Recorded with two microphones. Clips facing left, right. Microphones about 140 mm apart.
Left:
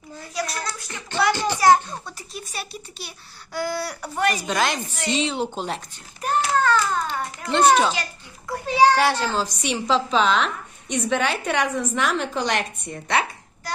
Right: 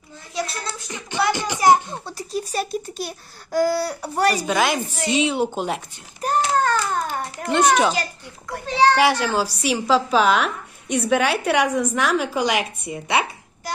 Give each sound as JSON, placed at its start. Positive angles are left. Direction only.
{"t": 0.3, "sound": "a sound", "side_deg": -25}
{"t": 2.0, "sound": "a child's voice", "side_deg": -35}
{"t": 4.4, "sound": "speech", "side_deg": -5}
{"t": 6.2, "sound": "a sound", "side_deg": -40}
{"t": 8.6, "sound": "children playing", "side_deg": 10}
{"t": 9.0, "sound": "speech", "side_deg": -10}